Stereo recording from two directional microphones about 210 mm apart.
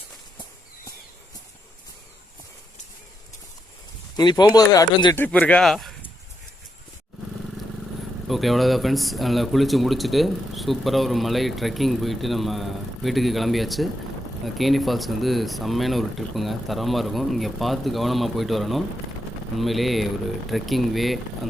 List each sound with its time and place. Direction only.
4.2 s speech: 20° left (ahead or behind)
5.1 s speech: 10° left (ahead or behind)
8.3 s speech: centre (ahead or behind)